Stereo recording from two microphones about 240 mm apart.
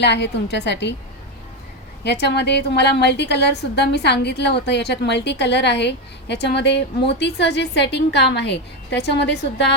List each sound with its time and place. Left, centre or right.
0.0 s a woman's voice: left
2.0 s a woman's voice: left